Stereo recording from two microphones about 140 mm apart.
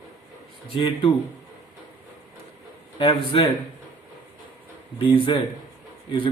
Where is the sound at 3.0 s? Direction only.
35° left (ahead or behind).